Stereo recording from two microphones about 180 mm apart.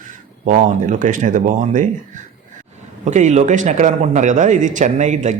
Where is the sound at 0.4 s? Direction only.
45° right (ahead or behind).